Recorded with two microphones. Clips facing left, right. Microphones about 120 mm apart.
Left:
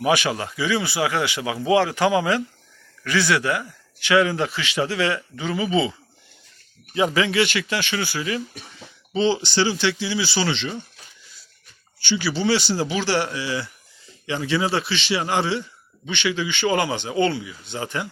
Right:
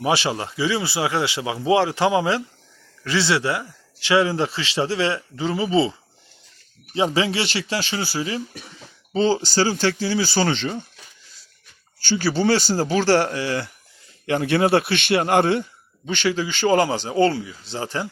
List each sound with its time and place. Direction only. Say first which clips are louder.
0.0 s speech: left 1 dB; 30° right (ahead or behind)
6.9 s speech: left 1 dB; 30° right (ahead or behind)
11.9 s a man's voice: right 3 dB; 45° right (ahead or behind)
16.0 s speech: right 2 dB; 40° right (ahead or behind)